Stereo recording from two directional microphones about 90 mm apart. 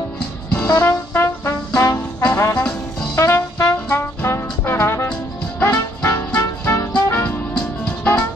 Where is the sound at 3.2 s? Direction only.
35° left (ahead or behind).